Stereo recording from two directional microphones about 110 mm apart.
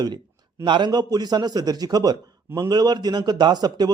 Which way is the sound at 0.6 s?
45° right (ahead or behind).